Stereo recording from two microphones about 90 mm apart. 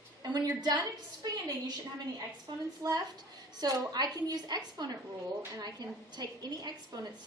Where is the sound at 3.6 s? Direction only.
45° right (ahead or behind).